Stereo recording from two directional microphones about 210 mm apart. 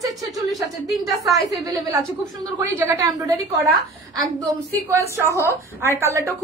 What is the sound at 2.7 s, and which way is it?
Speech, 15° right (ahead or behind).